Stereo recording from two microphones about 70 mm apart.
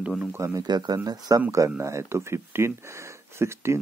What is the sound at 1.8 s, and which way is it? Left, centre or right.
Speech, right.